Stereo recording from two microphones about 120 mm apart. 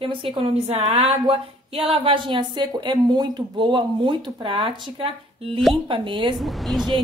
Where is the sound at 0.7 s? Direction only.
60° right (ahead or behind); by 6.3 s 45° right (ahead or behind).